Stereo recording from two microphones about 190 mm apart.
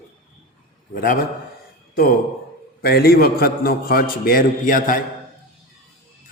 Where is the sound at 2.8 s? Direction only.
55° left (ahead or behind).